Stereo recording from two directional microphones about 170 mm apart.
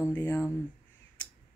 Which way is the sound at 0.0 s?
10° left (ahead or behind).